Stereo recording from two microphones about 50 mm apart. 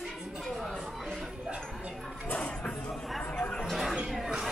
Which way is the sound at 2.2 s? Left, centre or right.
Left.